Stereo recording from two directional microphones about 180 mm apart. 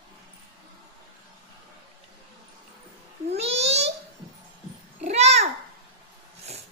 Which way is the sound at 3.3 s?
35° right (ahead or behind).